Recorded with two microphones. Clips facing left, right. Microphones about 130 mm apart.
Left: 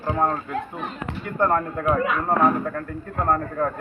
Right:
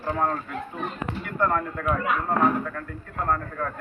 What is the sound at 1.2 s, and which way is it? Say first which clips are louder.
Speech: left 4 dB; 30° left (ahead or behind).